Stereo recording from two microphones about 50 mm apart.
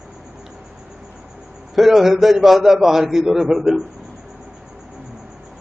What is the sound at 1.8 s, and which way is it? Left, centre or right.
A man's voice, centre.